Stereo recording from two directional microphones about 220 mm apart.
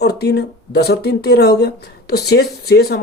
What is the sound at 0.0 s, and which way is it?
Speech, 50° left (ahead or behind).